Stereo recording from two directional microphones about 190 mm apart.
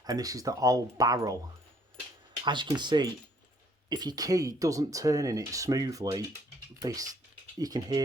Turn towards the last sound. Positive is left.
turn(degrees=-20)  # may be behind; listen again after turning